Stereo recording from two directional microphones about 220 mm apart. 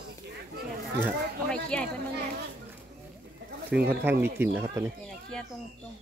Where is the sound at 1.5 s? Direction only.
5° left (ahead or behind).